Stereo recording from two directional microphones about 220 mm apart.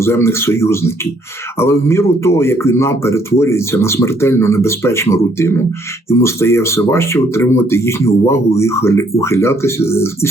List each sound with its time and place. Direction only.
0.0 s speech: 10° left (ahead or behind)